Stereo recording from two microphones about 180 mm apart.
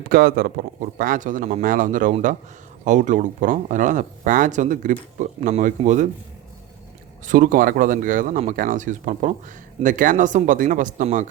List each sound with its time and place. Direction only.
0.1 s speech: 55° right (ahead or behind)
7.3 s speech: 45° right (ahead or behind)